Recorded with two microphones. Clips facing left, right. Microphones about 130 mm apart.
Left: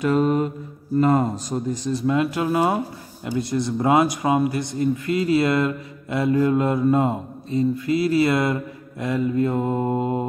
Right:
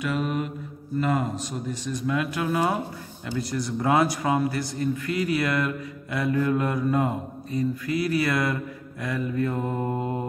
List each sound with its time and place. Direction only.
0.0 s mantra: 40° left (ahead or behind)
0.9 s a man's voice: 40° left (ahead or behind); by 10.2 s 20° left (ahead or behind)